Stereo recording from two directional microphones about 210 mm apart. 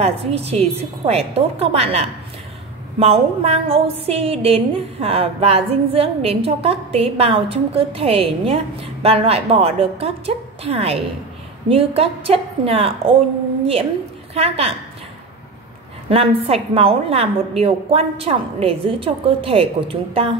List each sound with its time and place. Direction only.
0.0 s a woman's voice: 30° right (ahead or behind)
14.3 s a woman's voice: 30° right (ahead or behind)
16.1 s a woman's voice: 25° right (ahead or behind)